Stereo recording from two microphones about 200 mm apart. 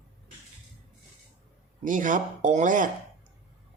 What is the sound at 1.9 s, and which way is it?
Speech, 40° right (ahead or behind).